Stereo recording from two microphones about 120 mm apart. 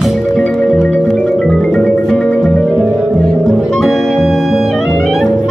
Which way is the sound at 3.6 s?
Centre (ahead or behind).